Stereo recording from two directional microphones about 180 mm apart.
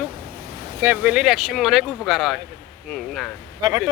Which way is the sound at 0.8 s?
10° right (ahead or behind).